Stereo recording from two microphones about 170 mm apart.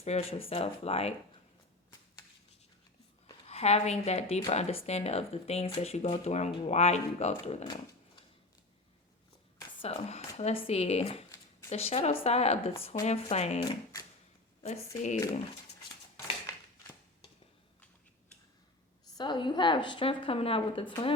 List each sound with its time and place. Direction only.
0.0 s speech: 40° left (ahead or behind)
3.4 s speech: 40° left (ahead or behind)
9.8 s speech: 35° left (ahead or behind)
19.1 s a woman's voice: 25° left (ahead or behind)